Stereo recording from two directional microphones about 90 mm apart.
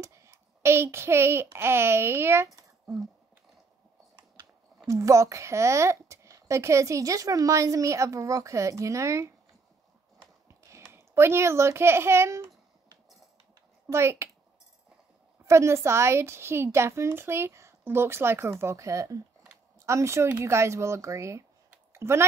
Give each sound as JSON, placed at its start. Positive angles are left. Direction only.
{"t": 0.0, "sound": "a child's voice", "side_deg": -35}
{"t": 4.8, "sound": "a child's voice", "side_deg": -35}
{"t": 10.6, "sound": "a child's voice", "side_deg": -30}
{"t": 13.8, "sound": "a child's voice", "side_deg": -30}
{"t": 15.4, "sound": "a woman's voice", "side_deg": -30}
{"t": 21.9, "sound": "a sound", "side_deg": -30}